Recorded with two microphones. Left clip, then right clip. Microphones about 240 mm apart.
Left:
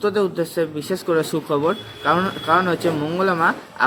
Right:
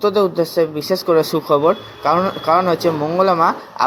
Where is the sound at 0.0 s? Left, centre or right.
Centre.